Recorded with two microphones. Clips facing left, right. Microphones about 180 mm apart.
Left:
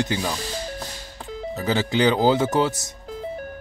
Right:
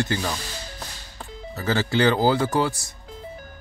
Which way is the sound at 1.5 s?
15° left (ahead or behind).